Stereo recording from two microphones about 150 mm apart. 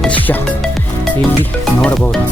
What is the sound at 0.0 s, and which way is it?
Music, 5° left (ahead or behind).